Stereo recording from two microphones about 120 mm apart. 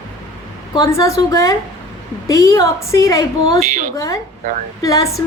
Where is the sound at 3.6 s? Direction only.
90° right.